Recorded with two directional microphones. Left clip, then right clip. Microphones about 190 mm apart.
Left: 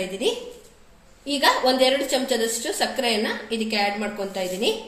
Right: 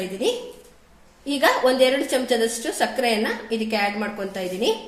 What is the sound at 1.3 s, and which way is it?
A woman's voice, 40° right (ahead or behind).